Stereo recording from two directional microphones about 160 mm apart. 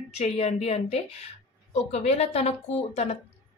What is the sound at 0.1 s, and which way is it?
A woman's voice, 40° left (ahead or behind).